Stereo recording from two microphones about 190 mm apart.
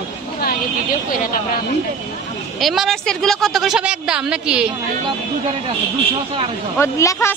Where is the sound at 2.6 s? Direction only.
Centre (ahead or behind).